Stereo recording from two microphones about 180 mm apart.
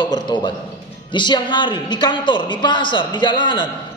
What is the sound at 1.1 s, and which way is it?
A woman's voice, 25° left (ahead or behind).